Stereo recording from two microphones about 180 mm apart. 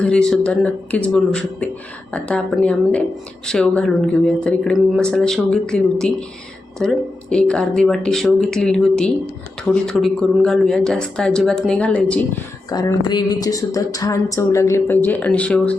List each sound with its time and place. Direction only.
0.0 s speech: 5° left (ahead or behind)
12.7 s speech: 20° left (ahead or behind)